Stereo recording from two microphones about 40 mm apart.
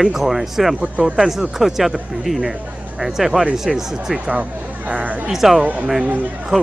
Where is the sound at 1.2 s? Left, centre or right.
Centre.